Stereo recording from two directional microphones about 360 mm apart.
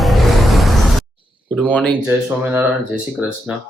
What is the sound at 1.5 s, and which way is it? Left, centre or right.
Speech, centre.